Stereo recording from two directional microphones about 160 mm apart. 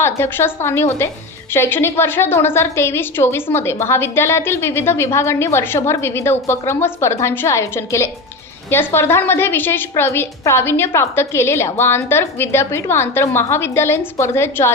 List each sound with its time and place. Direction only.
0.0 s a woman's voice: 15° left (ahead or behind)